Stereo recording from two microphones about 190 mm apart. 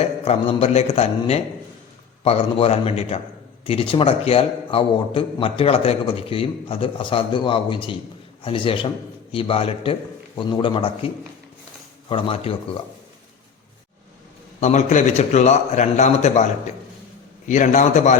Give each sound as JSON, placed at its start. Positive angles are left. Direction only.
{"t": 0.0, "sound": "a man's voice", "side_deg": 30}
{"t": 14.6, "sound": "a man's voice", "side_deg": 40}
{"t": 17.5, "sound": "a man's voice", "side_deg": 40}